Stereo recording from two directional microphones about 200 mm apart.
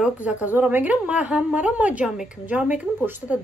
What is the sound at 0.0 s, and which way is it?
A woman's voice, 5° right (ahead or behind).